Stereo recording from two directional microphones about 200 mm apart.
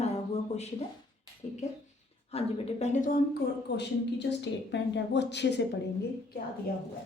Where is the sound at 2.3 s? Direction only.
35° left (ahead or behind).